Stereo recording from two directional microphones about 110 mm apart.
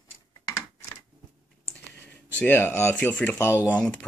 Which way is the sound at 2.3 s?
15° left (ahead or behind).